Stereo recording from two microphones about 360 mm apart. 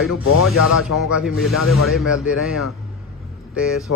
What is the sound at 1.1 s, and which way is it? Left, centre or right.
Speech, centre.